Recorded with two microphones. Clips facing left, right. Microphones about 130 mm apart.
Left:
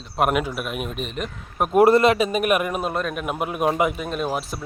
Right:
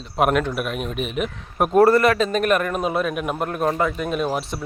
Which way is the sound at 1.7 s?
20° left (ahead or behind).